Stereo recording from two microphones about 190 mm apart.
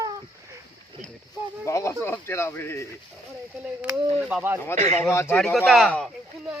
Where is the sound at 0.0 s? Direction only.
20° right (ahead or behind).